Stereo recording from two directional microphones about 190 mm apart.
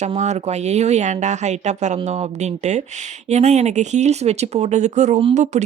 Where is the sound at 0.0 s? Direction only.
35° right (ahead or behind).